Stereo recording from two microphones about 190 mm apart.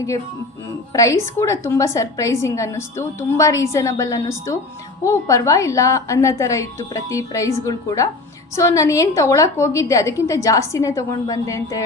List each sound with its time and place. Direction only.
0.9 s a woman's voice: 15° left (ahead or behind)